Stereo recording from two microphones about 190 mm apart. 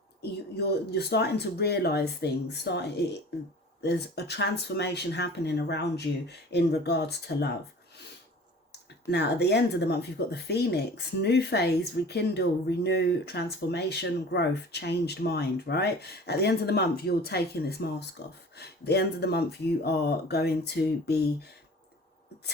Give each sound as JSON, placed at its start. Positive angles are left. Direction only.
{"t": 0.2, "sound": "speech", "side_deg": 60}
{"t": 9.0, "sound": "speech", "side_deg": 60}